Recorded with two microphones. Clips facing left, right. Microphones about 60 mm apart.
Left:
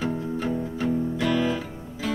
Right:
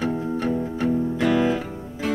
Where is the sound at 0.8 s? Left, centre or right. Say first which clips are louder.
Right 3 dB; right.